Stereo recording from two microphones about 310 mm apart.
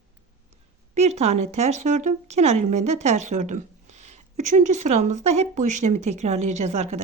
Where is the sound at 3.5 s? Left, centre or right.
Right.